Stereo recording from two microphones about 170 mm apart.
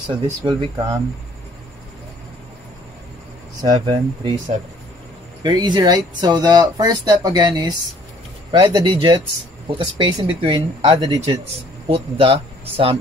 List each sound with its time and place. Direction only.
0.1 s speech: 30° right (ahead or behind)
3.6 s speech: 25° right (ahead or behind)
5.4 s speech: 25° right (ahead or behind)